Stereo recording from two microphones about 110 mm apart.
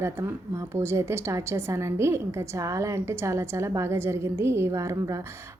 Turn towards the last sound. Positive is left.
turn(degrees=-30)  # may be behind; listen again after turning